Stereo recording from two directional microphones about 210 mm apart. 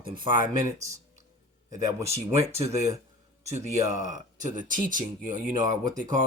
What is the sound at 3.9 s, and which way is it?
Speech, 35° right (ahead or behind).